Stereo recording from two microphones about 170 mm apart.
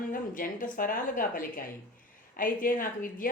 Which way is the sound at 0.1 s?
55° left (ahead or behind).